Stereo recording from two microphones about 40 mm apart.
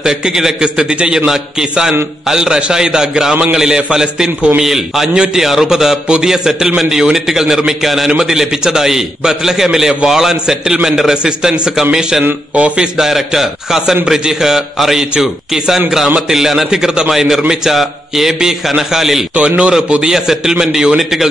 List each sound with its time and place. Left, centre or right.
0.3 s a man's voice: centre
12.5 s a man's voice: right
13.0 s a man's voice: centre
19.3 s a man's voice: right
20.0 s a man's voice: centre